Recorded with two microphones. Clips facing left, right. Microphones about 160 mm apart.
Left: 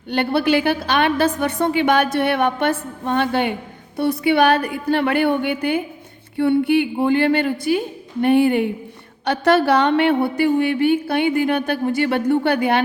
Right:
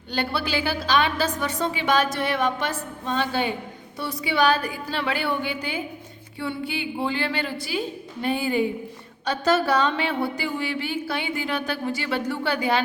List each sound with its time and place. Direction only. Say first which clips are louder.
0.1 s speech: left 9 dB; 55° left (ahead or behind)